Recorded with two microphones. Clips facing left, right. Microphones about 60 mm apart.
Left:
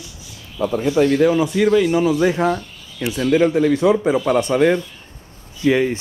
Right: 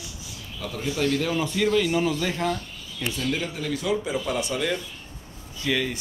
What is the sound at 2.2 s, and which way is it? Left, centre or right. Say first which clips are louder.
Speech: left 9 dB; left.